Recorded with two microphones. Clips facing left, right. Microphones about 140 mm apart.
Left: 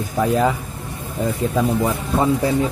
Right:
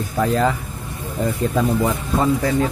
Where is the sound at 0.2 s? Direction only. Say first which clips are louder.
Left 1 dB; 10° left (ahead or behind).